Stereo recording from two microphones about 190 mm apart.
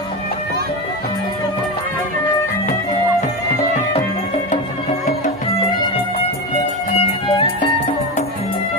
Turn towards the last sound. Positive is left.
turn(degrees=30)  # may be behind; listen again after turning